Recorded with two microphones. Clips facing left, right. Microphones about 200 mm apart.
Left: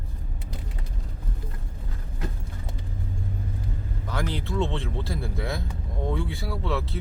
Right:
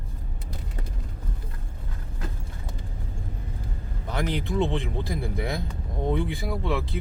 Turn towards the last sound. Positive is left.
turn(degrees=-15)  # may be behind; listen again after turning